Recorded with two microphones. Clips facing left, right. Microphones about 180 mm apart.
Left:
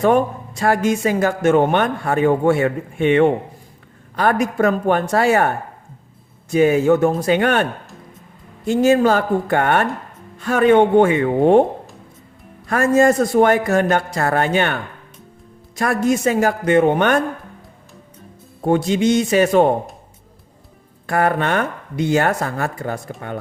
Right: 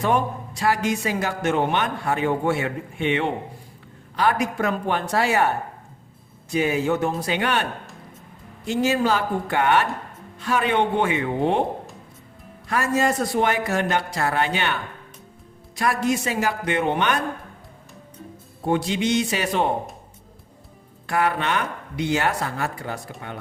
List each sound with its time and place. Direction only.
0.0 s a man's voice: 50° left (ahead or behind)
12.6 s a man's voice: 50° left (ahead or behind)
18.6 s a man's voice: 45° left (ahead or behind)
21.1 s a man's voice: 50° left (ahead or behind)